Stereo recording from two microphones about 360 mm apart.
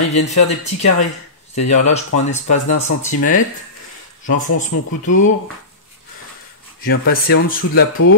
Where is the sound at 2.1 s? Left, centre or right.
Centre.